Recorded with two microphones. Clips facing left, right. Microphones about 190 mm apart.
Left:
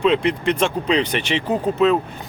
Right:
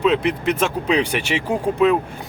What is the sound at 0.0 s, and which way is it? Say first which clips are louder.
Speech: left 1 dB; 5° right (ahead or behind).